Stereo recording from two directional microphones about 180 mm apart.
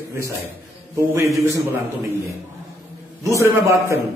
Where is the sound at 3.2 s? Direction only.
15° right (ahead or behind).